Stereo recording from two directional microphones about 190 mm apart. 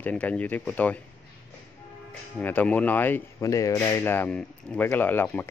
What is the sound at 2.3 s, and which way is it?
Speech, 5° left (ahead or behind).